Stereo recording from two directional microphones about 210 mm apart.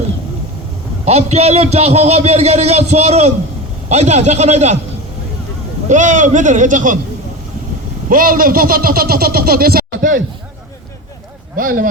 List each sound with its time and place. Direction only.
1.0 s a man's voice: 30° right (ahead or behind)
5.9 s a man's voice: 35° right (ahead or behind)
8.1 s speech: 40° right (ahead or behind)
11.5 s a man's voice: 40° right (ahead or behind)